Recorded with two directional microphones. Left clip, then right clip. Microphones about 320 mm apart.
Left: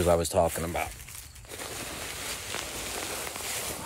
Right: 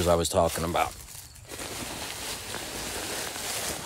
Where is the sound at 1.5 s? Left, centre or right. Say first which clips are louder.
Right 1 dB; right.